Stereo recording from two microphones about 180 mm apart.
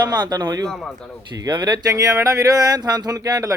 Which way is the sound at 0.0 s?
20° right (ahead or behind).